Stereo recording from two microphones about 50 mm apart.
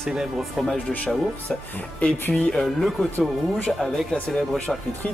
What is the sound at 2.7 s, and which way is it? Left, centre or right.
Speech, centre.